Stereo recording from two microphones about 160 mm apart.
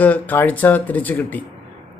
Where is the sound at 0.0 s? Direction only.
10° left (ahead or behind).